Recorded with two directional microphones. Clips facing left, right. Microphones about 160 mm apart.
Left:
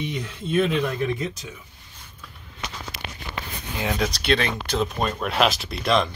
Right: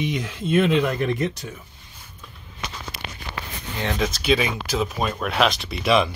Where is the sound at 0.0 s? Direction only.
90° right.